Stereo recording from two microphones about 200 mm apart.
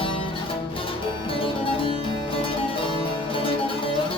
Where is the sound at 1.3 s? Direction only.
25° left (ahead or behind).